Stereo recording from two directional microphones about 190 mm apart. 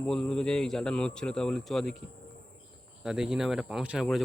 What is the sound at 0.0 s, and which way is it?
A man's voice, 5° left (ahead or behind).